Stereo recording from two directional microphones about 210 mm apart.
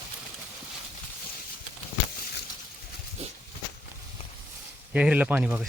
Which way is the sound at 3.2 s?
30° right (ahead or behind).